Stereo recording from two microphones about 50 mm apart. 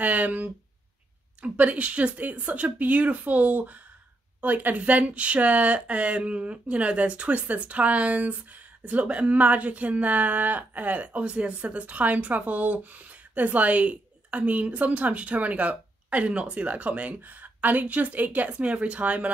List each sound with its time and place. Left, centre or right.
0.0 s speech: right